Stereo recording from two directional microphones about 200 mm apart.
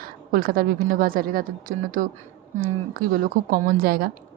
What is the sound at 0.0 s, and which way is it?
A woman's voice, 45° right (ahead or behind).